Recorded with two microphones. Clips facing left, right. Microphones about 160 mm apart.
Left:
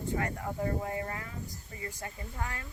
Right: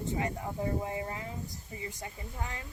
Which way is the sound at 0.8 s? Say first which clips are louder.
Even; 20° right (ahead or behind).